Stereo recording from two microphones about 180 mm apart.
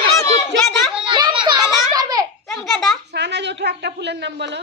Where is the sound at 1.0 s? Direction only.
25° right (ahead or behind).